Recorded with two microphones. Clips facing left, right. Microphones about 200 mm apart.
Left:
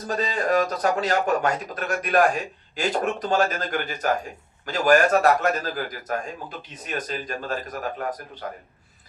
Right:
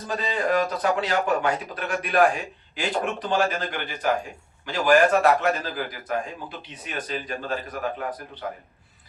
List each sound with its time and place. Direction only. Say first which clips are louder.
0.1 s a man's voice: left 1 dB; 40° left (ahead or behind)